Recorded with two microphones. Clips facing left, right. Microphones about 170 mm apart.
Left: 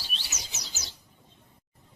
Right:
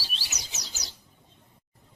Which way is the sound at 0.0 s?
Centre (ahead or behind).